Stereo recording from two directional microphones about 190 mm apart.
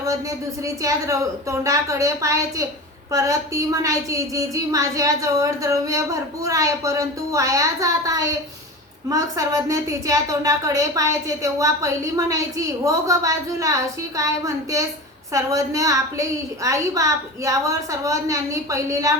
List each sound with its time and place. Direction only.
0.0 s a woman's voice: 15° right (ahead or behind)